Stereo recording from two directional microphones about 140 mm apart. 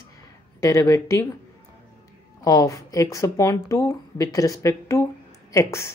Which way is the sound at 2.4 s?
25° left (ahead or behind).